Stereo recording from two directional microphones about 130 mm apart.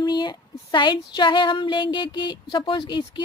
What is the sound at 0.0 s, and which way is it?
Female singing, 35° left (ahead or behind).